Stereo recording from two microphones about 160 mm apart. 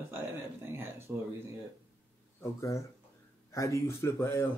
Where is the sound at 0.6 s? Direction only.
15° right (ahead or behind).